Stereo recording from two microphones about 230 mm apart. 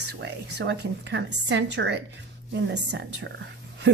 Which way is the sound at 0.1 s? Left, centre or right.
Right.